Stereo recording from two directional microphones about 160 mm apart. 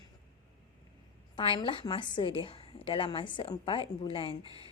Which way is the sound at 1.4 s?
30° left (ahead or behind).